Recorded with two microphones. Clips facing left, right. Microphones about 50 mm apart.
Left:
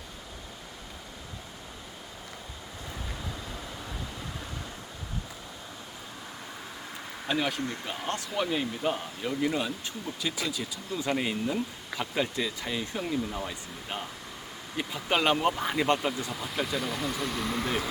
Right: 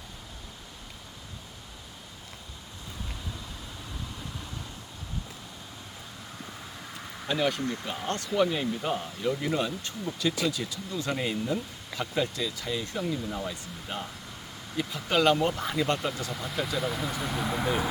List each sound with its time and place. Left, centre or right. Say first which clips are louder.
7.3 s speech: right 2 dB; centre
10.9 s speech: left 1 dB; centre
16.3 s speech: even; centre